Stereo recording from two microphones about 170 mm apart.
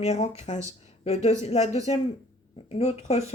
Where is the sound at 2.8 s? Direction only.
40° left (ahead or behind).